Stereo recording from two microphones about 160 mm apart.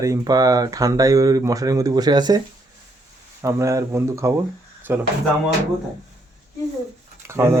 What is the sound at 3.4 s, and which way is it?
Speech, 20° right (ahead or behind).